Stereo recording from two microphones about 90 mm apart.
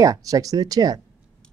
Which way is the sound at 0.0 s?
40° right (ahead or behind).